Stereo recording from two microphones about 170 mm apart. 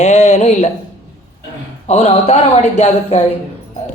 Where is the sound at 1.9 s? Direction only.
40° left (ahead or behind).